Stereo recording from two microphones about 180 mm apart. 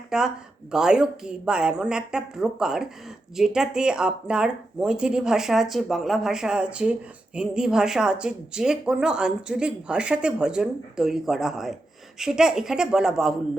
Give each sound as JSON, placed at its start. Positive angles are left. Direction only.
{"t": 0.1, "sound": "speech", "side_deg": 0}